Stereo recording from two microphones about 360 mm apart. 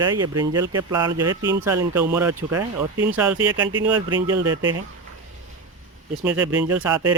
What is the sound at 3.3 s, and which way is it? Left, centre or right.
Speech, right.